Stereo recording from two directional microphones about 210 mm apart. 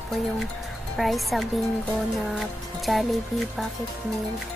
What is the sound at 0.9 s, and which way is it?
Speech, centre (ahead or behind).